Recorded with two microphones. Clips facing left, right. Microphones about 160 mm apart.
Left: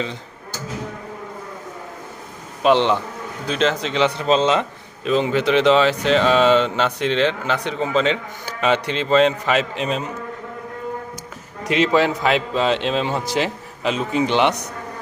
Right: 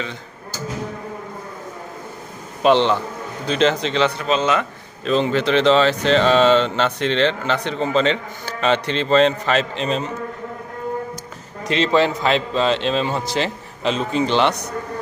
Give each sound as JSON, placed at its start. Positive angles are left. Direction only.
{"t": 2.6, "sound": "a man's voice", "side_deg": 15}
{"t": 4.3, "sound": "a man's voice", "side_deg": 25}
{"t": 5.0, "sound": "speech", "side_deg": 10}
{"t": 11.7, "sound": "speech", "side_deg": 10}